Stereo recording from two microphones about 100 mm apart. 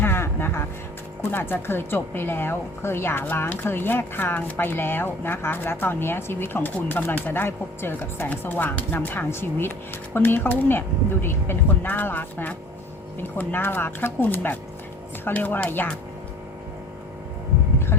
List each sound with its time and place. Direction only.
0.0 s music: 20° left (ahead or behind)
1.3 s speech: 20° left (ahead or behind)